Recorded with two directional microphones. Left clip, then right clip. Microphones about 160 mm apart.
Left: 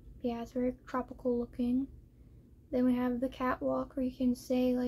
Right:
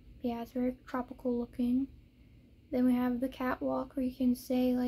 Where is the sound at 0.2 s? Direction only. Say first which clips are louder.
Left 1 dB; 20° right (ahead or behind).